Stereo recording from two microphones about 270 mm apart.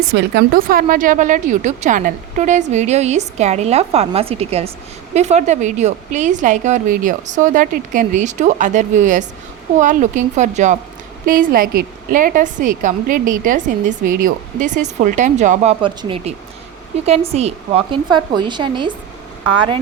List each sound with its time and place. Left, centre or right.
0.1 s a woman's voice: right; by 18.9 s centre